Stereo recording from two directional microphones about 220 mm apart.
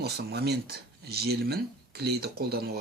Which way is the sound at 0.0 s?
45° right (ahead or behind).